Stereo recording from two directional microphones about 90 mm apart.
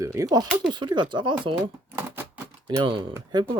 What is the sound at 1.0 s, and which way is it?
Speech, 60° right (ahead or behind).